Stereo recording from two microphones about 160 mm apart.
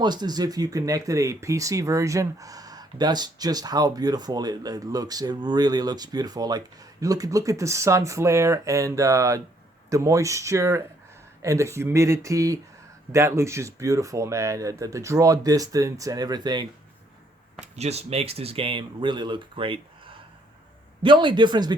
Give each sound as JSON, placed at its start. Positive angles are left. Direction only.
{"t": 0.0, "sound": "speech", "side_deg": -25}
{"t": 17.6, "sound": "speech", "side_deg": -40}